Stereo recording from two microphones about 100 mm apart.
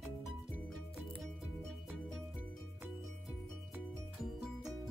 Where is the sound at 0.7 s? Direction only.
5° left (ahead or behind).